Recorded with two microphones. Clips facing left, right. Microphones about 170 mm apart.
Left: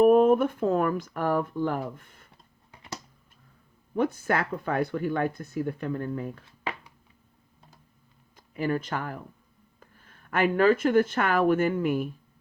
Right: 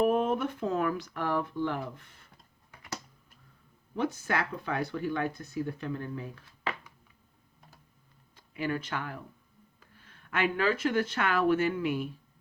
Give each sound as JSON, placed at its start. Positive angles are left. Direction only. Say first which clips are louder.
{"t": 0.0, "sound": "speech", "louder": "left 8 dB", "side_deg": 50}
{"t": 2.7, "sound": "a sound", "louder": "left 1 dB", "side_deg": 25}
{"t": 3.9, "sound": "speech", "louder": "left 5 dB", "side_deg": 50}
{"t": 8.4, "sound": "speech", "louder": "left 5 dB", "side_deg": 45}